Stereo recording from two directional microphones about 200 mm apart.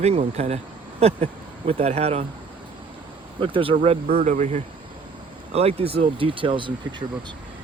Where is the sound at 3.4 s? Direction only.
25° right (ahead or behind).